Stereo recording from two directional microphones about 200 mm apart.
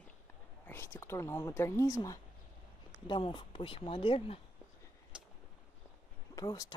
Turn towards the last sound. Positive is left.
turn(degrees=20)  # may be behind; listen again after turning